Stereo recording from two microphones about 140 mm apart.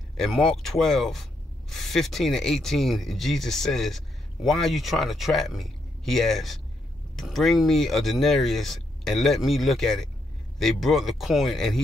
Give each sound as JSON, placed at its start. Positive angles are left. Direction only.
{"t": 0.2, "sound": "speech", "side_deg": 5}